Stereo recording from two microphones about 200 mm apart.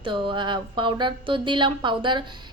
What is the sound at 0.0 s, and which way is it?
A woman's voice, 25° right (ahead or behind).